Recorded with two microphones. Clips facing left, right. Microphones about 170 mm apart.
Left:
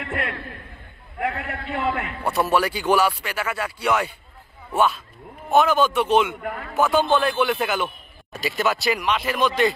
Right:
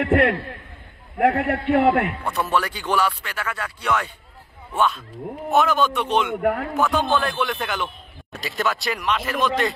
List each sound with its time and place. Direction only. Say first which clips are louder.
0.0 s a man's voice: right 10 dB; 65° right (ahead or behind)
2.2 s speech: left 2 dB; 10° left (ahead or behind)
6.4 s a man's voice: right 9 dB; 70° right (ahead or behind)
6.7 s speech: left 2 dB; centre (ahead or behind)